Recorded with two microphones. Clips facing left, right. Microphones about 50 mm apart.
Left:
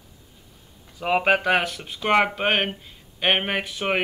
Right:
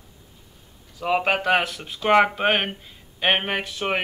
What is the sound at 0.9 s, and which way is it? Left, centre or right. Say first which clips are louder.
Speech: left 1 dB; centre.